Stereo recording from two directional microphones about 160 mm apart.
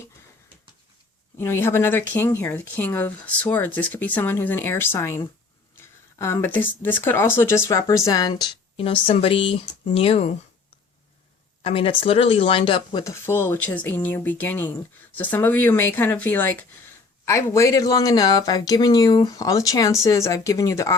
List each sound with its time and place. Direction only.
1.4 s speech: 15° left (ahead or behind)
8.7 s speech: 35° left (ahead or behind)
11.6 s speech: 35° left (ahead or behind)
13.2 s speech: 15° left (ahead or behind)